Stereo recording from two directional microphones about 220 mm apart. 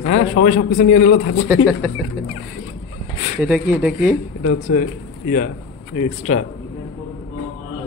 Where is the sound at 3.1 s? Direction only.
30° left (ahead or behind).